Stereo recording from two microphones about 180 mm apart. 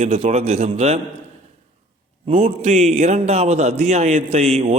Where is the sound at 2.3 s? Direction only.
35° right (ahead or behind).